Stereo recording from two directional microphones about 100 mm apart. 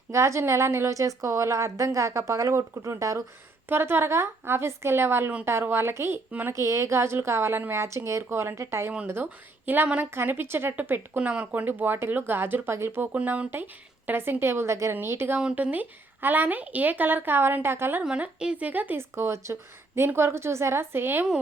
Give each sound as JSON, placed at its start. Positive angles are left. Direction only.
{"t": 0.1, "sound": "a woman's voice", "side_deg": -30}
{"t": 3.7, "sound": "a woman's voice", "side_deg": -20}
{"t": 15.4, "sound": "a woman's voice", "side_deg": -10}
{"t": 18.0, "sound": "a woman's voice", "side_deg": -10}